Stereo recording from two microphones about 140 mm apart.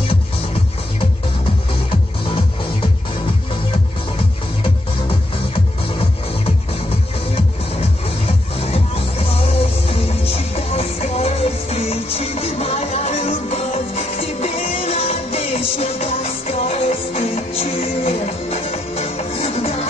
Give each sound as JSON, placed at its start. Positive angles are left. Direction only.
{"t": 10.5, "sound": "music", "side_deg": 45}